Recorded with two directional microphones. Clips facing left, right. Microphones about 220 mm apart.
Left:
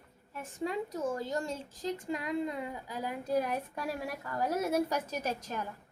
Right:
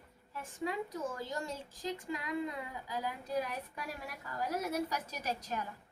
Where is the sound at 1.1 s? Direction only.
25° left (ahead or behind).